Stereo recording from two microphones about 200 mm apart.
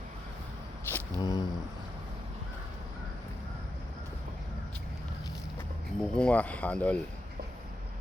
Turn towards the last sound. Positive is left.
turn(degrees=5)  # may be behind; listen again after turning